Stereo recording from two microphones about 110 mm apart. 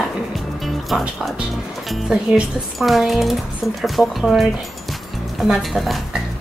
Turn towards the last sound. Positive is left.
turn(degrees=0)  # may be behind; listen again after turning